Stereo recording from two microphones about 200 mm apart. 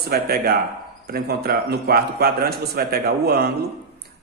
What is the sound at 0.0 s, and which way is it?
A man's voice, 50° right (ahead or behind).